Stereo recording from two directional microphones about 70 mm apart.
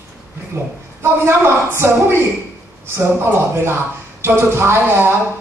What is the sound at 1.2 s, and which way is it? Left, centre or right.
A woman's voice, right.